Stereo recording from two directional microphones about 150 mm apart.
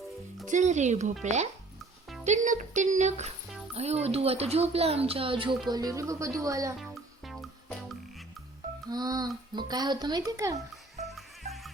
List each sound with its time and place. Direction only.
0.4 s speech: 55° right (ahead or behind); by 5.5 s 35° right (ahead or behind)
5.7 s a child's voice: 25° right (ahead or behind)
8.9 s a child's voice: 25° right (ahead or behind)
11.0 s music: centre (ahead or behind)